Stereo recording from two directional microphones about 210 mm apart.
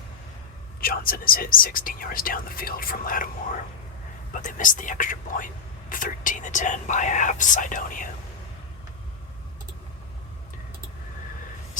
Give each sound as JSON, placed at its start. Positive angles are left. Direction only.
{"t": 0.8, "sound": "speech", "side_deg": 45}
{"t": 4.3, "sound": "speech", "side_deg": 40}